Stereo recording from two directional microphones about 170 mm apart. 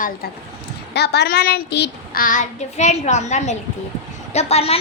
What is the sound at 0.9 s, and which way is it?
Child singing, 75° left (ahead or behind).